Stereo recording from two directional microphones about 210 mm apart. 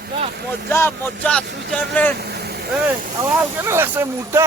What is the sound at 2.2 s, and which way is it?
Vehicle, 50° right (ahead or behind).